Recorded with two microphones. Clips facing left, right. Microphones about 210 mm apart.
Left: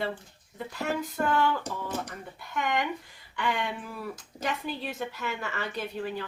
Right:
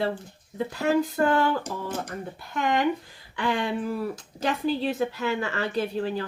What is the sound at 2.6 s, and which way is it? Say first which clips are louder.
Speech: right 6 dB; 30° right (ahead or behind).